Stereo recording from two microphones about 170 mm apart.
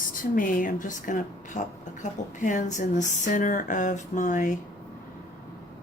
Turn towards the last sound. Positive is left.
turn(degrees=50)  # may be behind; listen again after turning